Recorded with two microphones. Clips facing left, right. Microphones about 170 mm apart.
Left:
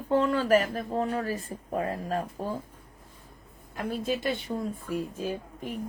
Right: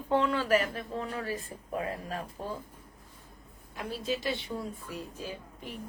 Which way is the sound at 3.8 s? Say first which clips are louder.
Left 4 dB; 50° left (ahead or behind).